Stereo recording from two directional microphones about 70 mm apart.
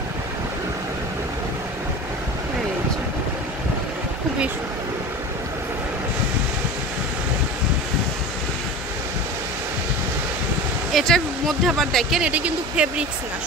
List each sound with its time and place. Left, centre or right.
10.9 s speech: centre
12.2 s speech: centre